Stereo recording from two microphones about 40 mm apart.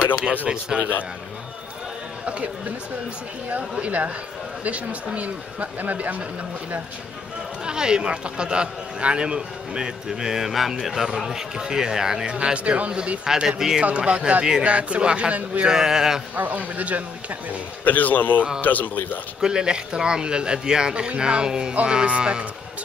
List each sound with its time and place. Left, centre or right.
0.5 s speech: right
2.2 s speech: right
3.8 s speech: right
7.6 s a man's voice: centre
12.5 s speech: right
13.4 s a man's voice: centre
13.8 s speech: right
15.6 s a man's voice: centre
16.3 s speech: right
17.8 s a man's voice: left
19.4 s speech: right